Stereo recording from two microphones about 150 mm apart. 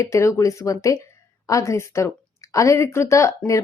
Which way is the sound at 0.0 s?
20° left (ahead or behind).